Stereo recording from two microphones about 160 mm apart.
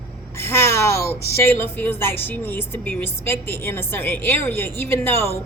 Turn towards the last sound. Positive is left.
turn(degrees=15)  # may be behind; listen again after turning